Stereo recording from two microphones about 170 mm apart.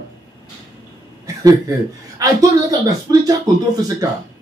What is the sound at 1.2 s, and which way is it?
Speech, 20° right (ahead or behind).